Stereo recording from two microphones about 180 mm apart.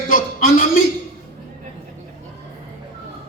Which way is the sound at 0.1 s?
50° left (ahead or behind).